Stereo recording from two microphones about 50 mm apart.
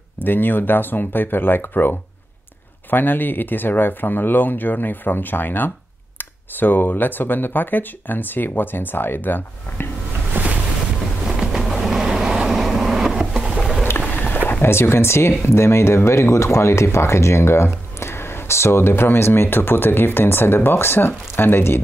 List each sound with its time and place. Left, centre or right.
0.2 s speech: left
10.4 s boat: right
11.2 s vehicle: centre
14.0 s a sound: left
14.6 s speech: left